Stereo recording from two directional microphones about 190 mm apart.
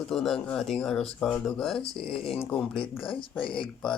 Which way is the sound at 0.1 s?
Centre (ahead or behind).